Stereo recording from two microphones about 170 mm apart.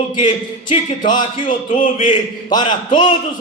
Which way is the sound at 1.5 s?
50° left (ahead or behind).